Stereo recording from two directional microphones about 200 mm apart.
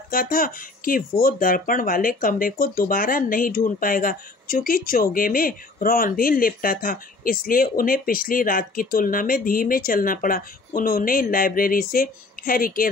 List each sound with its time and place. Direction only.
0.1 s speech: 45° left (ahead or behind)